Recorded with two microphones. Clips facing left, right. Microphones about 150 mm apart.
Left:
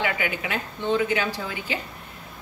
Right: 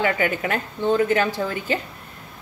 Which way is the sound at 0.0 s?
45° right (ahead or behind).